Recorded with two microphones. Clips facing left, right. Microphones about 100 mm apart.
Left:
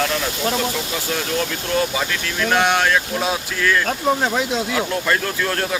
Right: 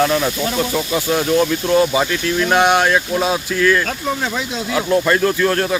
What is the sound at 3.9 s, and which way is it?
Speech, 30° left (ahead or behind).